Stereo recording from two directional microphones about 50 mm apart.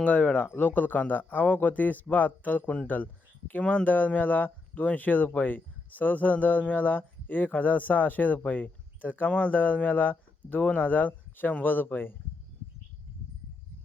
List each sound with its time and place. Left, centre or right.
0.0 s speech: left
0.5 s speech: left
3.6 s speech: left
3.8 s speech: left